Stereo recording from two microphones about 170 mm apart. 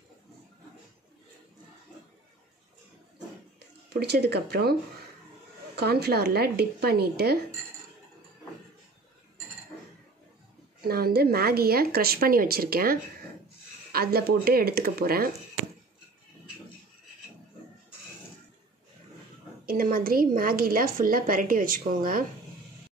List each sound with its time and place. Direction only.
3.5 s speech: 75° right (ahead or behind)
5.8 s speech: 70° right (ahead or behind)
10.8 s a woman's voice: 60° right (ahead or behind)
19.6 s a woman's voice: 60° right (ahead or behind)